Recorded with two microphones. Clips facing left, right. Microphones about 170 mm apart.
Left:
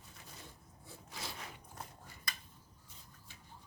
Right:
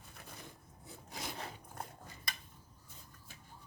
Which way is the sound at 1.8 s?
55° right (ahead or behind).